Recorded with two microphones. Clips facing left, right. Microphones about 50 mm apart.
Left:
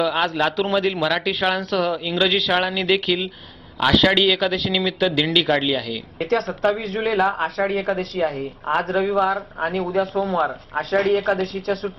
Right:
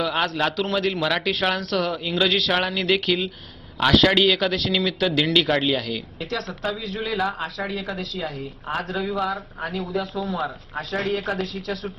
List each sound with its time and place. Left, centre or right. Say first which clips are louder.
0.0 s speech: left 3 dB; centre
6.1 s speech: left 8 dB; left
10.8 s speech: left 7 dB; left